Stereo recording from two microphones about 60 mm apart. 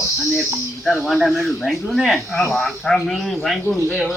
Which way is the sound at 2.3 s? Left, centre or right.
Centre.